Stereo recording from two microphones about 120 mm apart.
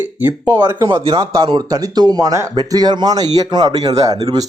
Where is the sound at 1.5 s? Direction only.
35° right (ahead or behind).